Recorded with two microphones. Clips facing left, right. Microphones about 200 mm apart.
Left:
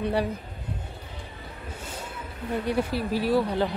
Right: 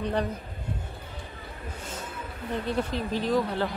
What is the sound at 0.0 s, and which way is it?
Speech, 10° left (ahead or behind).